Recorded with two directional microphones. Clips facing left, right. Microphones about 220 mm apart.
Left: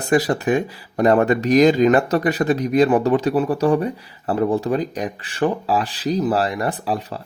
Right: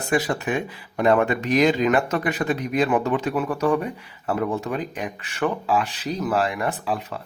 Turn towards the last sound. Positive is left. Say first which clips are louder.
# left 3 dB
turn(degrees=35)  # may be behind; listen again after turning